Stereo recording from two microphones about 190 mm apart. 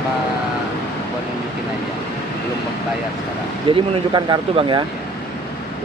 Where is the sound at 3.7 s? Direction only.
25° right (ahead or behind).